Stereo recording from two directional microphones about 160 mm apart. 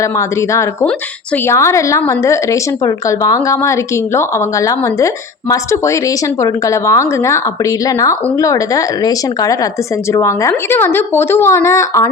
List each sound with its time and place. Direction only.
0.0 s speech: 20° left (ahead or behind)
0.9 s a woman's voice: 10° left (ahead or behind)
1.5 s a woman's voice: 20° left (ahead or behind)